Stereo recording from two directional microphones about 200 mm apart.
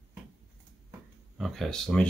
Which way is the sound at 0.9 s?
Centre (ahead or behind).